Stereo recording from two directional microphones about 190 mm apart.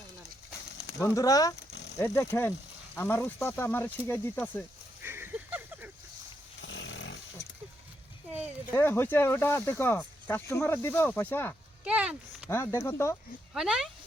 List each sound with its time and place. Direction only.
1.0 s speech: 15° left (ahead or behind)
5.0 s a sound: 10° right (ahead or behind)
6.6 s a sound: 75° left (ahead or behind)
8.7 s speech: 10° left (ahead or behind)
11.9 s speech: 5° right (ahead or behind)
12.5 s speech: 15° left (ahead or behind)
13.5 s speech: 5° right (ahead or behind)